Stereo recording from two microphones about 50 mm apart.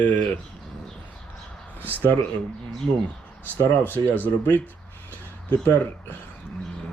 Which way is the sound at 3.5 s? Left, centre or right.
Left.